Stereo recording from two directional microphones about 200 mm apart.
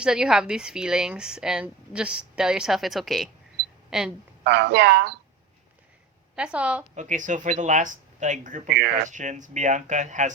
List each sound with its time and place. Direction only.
0.0 s a woman's voice: 5° right (ahead or behind)
4.4 s speech: 60° right (ahead or behind)
6.3 s a woman's voice: 5° right (ahead or behind)
6.9 s speech: 40° right (ahead or behind)